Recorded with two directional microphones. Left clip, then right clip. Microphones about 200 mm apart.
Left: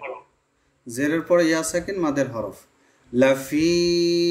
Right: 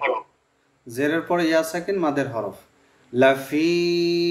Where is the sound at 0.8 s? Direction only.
55° left (ahead or behind).